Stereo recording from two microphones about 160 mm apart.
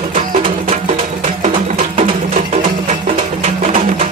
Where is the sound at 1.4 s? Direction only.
45° right (ahead or behind).